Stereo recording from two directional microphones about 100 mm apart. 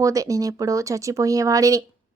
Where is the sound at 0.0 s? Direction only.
35° right (ahead or behind).